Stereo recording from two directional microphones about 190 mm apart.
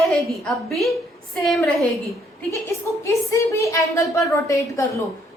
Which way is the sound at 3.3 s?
15° left (ahead or behind).